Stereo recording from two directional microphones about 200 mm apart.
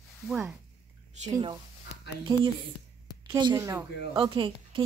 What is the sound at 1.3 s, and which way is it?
Speech, 20° right (ahead or behind).